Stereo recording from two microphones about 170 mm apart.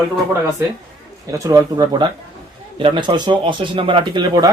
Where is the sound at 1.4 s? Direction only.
20° right (ahead or behind).